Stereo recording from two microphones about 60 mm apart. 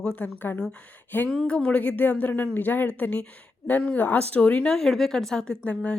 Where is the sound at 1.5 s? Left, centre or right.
Centre.